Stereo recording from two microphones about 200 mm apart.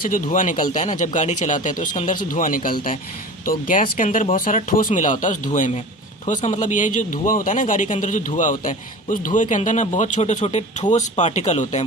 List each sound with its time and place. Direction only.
0.1 s speech: 40° left (ahead or behind)